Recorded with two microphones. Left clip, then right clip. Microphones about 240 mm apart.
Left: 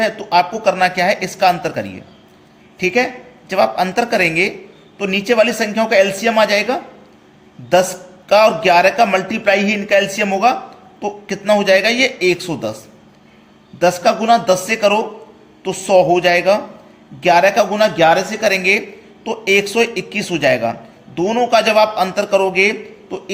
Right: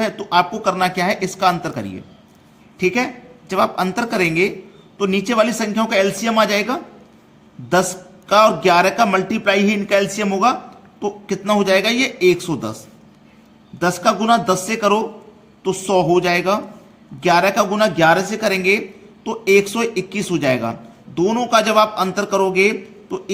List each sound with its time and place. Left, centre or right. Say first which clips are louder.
0.0 s a man's voice: left 3 dB; right